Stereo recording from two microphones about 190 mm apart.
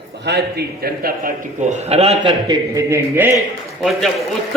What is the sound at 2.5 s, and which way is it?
Speech, 15° right (ahead or behind).